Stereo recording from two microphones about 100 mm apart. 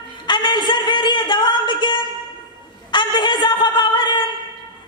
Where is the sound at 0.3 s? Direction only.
50° left (ahead or behind).